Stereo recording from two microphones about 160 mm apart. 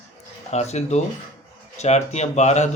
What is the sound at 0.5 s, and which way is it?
Speech, 45° left (ahead or behind).